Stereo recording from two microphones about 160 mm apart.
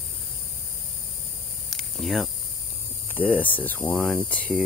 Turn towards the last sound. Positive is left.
turn(degrees=10)  # may be behind; listen again after turning